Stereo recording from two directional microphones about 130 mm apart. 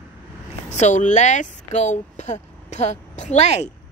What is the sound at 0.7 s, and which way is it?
Speech, 65° left (ahead or behind).